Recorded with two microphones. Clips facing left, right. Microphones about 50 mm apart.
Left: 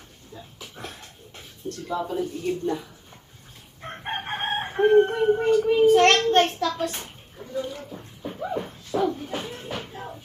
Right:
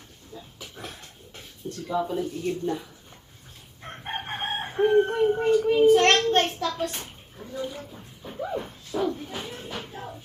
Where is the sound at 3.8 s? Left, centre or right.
Centre.